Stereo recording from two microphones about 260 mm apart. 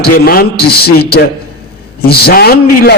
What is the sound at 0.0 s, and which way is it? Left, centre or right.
A man's voice, left.